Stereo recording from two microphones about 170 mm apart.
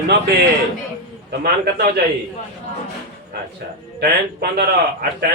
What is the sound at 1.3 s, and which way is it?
Speech, 65° right (ahead or behind).